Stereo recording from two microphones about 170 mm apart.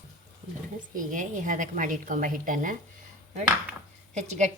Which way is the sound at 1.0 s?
50° right (ahead or behind).